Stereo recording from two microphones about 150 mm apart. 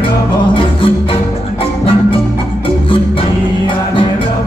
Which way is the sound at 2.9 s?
35° left (ahead or behind).